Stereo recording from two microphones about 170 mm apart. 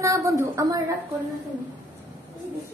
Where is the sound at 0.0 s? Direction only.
20° right (ahead or behind).